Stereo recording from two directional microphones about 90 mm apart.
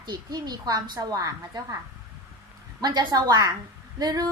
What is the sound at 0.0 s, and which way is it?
A woman's voice, 55° right (ahead or behind).